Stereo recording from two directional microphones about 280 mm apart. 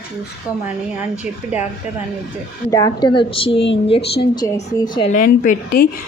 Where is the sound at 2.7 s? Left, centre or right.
Centre.